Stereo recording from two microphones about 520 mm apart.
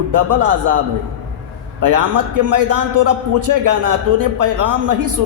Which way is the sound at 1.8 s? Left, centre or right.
Right.